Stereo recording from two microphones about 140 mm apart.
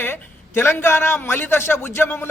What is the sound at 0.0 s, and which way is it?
A man's voice, 15° left (ahead or behind).